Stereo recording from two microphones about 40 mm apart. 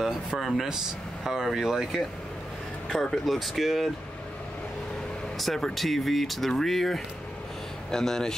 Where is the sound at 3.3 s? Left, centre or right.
Centre.